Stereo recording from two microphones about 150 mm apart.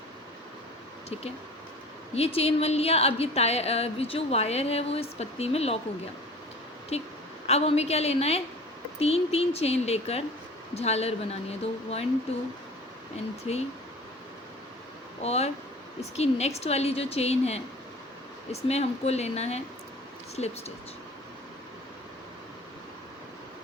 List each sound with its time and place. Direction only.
2.1 s speech: 45° left (ahead or behind)
6.9 s speech: 45° left (ahead or behind)
13.5 s speech: 40° left (ahead or behind)
15.2 s speech: 45° left (ahead or behind)